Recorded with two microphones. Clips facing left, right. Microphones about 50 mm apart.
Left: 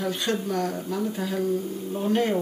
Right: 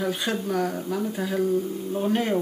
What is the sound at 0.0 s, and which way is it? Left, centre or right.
Speech, centre.